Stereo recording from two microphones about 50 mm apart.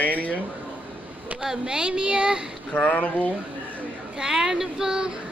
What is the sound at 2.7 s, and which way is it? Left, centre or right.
Speech, left.